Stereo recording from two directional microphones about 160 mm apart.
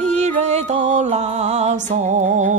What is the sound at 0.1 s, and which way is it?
Music, 45° right (ahead or behind).